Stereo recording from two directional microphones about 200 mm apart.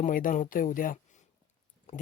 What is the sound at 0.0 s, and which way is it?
Speech, 40° left (ahead or behind).